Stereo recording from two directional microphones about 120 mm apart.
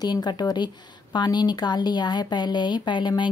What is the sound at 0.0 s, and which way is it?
Speech, 35° left (ahead or behind).